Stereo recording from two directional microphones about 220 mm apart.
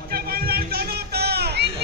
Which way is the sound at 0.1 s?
45° right (ahead or behind).